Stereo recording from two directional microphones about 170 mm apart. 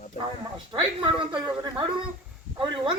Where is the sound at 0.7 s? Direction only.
30° right (ahead or behind).